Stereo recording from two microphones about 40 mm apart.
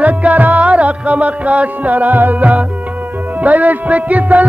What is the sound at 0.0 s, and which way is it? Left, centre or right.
Music, right.